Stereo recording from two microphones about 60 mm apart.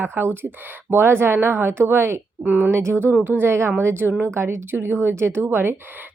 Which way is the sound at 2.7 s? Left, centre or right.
Right.